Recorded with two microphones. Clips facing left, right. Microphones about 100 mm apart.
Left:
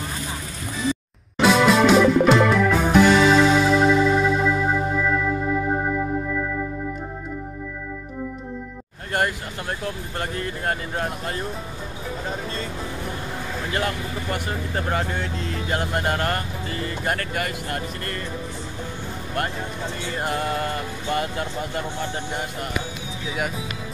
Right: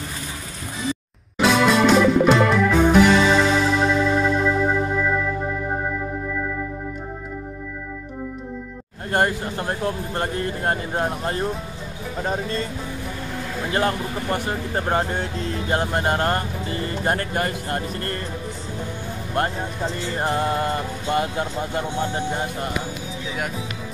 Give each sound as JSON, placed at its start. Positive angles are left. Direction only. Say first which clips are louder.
{"t": 1.4, "sound": "music", "louder": "left 1 dB", "side_deg": 0}
{"t": 9.1, "sound": "speech", "louder": "right 3 dB", "side_deg": -35}
{"t": 13.7, "sound": "speech", "louder": "right 5 dB", "side_deg": -30}
{"t": 20.2, "sound": "speech", "louder": "right 3 dB", "side_deg": -25}